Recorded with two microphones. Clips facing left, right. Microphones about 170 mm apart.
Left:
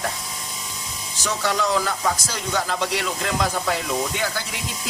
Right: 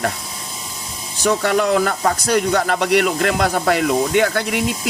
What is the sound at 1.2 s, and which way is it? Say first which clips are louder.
Speech: right 7 dB; 60° right (ahead or behind).